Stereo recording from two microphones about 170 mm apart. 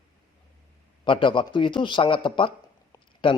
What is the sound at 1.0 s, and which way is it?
A man's voice, 30° left (ahead or behind).